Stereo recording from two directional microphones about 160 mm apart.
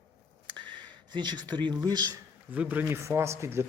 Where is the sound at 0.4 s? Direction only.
30° right (ahead or behind).